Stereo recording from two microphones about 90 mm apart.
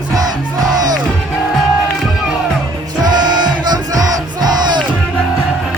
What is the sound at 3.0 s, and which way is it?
Music, 55° right (ahead or behind).